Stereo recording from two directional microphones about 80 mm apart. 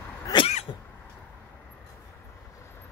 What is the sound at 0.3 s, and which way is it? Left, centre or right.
Cat, left.